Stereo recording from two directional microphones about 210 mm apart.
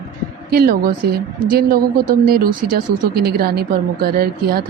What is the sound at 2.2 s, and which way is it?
A woman's voice, 45° right (ahead or behind).